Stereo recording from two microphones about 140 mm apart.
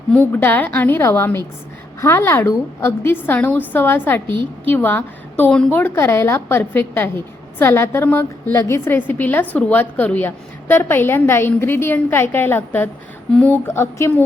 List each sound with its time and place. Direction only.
0.1 s a woman's voice: 10° left (ahead or behind)